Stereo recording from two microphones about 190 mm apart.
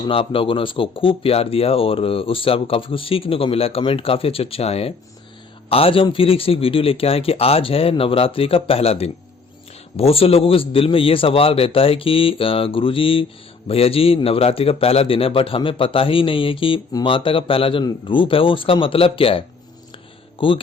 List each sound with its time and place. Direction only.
0.1 s a man's voice: 30° left (ahead or behind)
20.4 s a man's voice: 25° left (ahead or behind)